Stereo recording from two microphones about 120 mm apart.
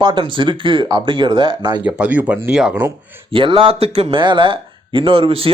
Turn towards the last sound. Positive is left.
turn(degrees=-50)  # may be behind; listen again after turning